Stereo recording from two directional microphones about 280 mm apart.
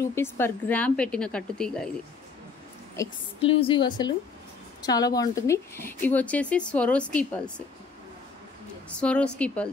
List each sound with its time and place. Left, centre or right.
0.0 s a woman's voice: centre
3.0 s a woman's voice: centre
9.0 s a woman's voice: centre